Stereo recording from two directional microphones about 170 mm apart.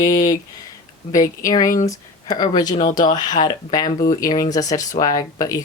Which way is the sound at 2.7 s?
45° left (ahead or behind).